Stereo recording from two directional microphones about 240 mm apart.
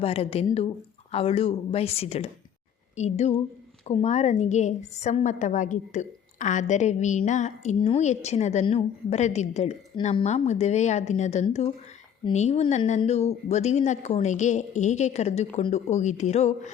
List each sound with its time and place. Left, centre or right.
0.0 s a woman's voice: left